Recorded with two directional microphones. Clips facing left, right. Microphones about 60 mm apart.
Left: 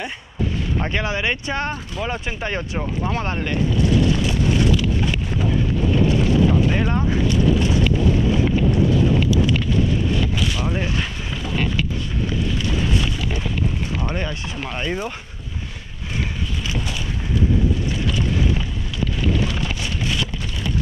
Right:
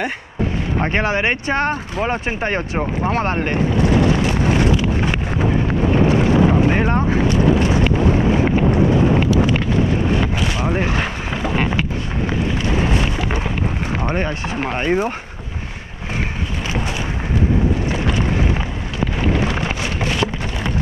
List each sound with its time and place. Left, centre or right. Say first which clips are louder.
0.7 s speech: right 6 dB; right
5.9 s boat: right 3 dB; right
10.9 s a sound: right 5 dB; right
12.6 s boat: right 4 dB; right
13.9 s speech: right 5 dB; right
17.9 s boat: right 4 dB; right
19.2 s a sound: right 3 dB; right